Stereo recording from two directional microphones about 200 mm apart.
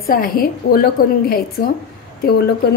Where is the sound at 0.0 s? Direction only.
45° left (ahead or behind).